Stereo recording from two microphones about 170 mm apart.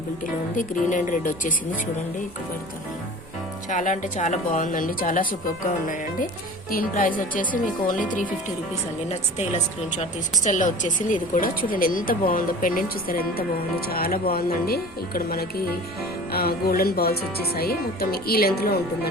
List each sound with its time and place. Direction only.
0.5 s speech: 50° left (ahead or behind)
3.7 s speech: 45° left (ahead or behind)
6.7 s speech: 55° left (ahead or behind)
10.4 s speech: 50° left (ahead or behind); by 18.8 s 65° left (ahead or behind)